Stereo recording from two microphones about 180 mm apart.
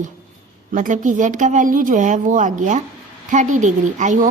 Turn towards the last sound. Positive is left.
turn(degrees=-40)  # may be behind; listen again after turning